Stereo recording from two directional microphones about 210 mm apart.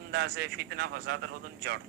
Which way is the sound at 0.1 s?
50° right (ahead or behind).